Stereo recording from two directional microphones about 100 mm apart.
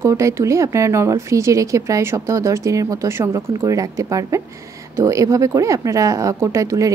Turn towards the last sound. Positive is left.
turn(degrees=-35)  # may be behind; listen again after turning